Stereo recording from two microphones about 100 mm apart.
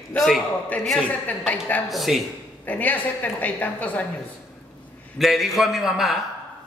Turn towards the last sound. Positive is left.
turn(degrees=0)  # may be behind; listen again after turning